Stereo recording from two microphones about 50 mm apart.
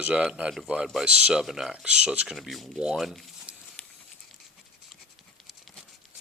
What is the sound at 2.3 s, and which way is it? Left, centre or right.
Speech, centre.